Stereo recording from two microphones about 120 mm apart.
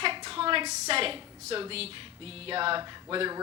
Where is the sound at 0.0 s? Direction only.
45° right (ahead or behind).